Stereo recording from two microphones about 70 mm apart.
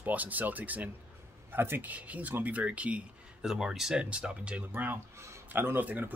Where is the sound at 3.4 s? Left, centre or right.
Centre.